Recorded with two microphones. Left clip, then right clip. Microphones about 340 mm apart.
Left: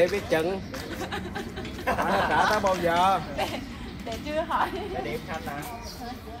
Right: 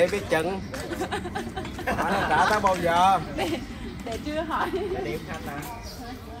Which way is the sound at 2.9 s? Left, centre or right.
Centre.